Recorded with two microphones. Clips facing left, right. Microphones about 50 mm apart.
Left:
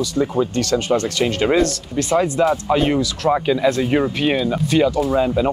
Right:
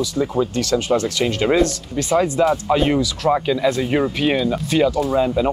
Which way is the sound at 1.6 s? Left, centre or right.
Centre.